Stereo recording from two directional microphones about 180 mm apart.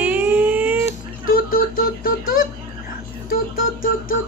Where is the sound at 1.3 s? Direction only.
55° left (ahead or behind).